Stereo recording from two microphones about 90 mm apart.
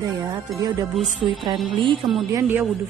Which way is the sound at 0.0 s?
45° right (ahead or behind).